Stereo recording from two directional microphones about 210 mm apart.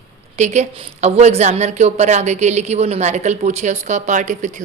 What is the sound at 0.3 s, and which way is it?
A woman's voice, 35° right (ahead or behind).